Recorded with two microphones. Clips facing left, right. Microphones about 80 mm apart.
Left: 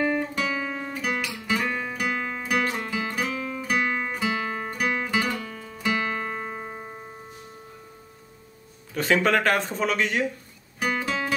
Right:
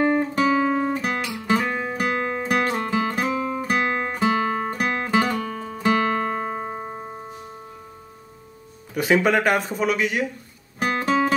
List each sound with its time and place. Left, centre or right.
0.0 s guitar: right
1.2 s music: right; by 7.2 s centre
8.9 s speech: centre
11.0 s guitar: right